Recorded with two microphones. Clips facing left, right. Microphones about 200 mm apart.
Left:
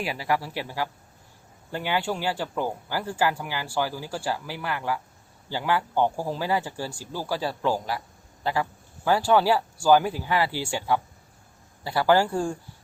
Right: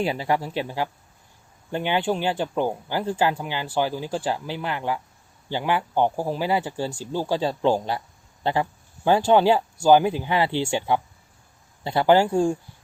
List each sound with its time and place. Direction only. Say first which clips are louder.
0.0 s speech: right 4 dB; 25° right (ahead or behind)